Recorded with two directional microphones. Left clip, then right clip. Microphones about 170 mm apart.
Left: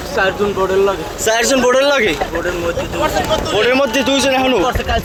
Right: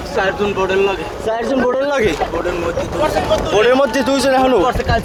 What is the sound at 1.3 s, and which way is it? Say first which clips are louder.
Speech: left 4 dB; 10° left (ahead or behind).